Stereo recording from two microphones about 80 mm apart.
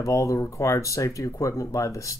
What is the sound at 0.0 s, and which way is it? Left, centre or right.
Speech, left.